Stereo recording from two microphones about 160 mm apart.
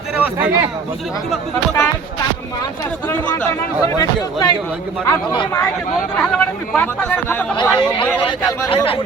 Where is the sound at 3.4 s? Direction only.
20° left (ahead or behind).